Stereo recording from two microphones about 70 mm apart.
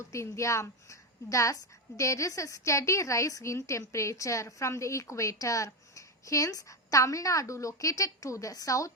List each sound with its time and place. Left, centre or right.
0.0 s a woman's voice: left